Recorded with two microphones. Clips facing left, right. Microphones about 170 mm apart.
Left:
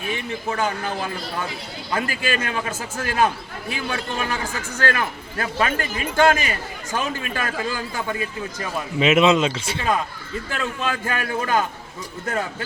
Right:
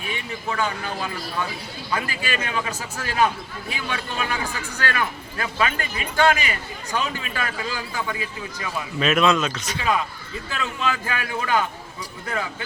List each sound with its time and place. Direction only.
0.1 s a man's voice: 45° left (ahead or behind)
2.0 s a man's voice: 45° left (ahead or behind)
9.0 s speech: 20° left (ahead or behind)
10.5 s a man's voice: 45° left (ahead or behind)